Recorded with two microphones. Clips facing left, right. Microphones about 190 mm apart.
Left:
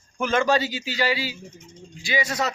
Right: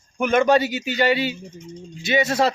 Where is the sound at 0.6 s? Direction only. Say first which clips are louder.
Right 5 dB; 60° right (ahead or behind).